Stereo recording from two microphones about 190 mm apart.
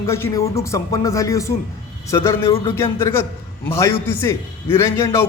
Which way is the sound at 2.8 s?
15° left (ahead or behind).